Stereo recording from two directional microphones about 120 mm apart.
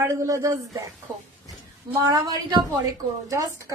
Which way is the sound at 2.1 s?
35° right (ahead or behind).